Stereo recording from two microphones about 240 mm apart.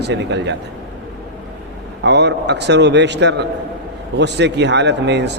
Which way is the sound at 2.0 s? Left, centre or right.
Right.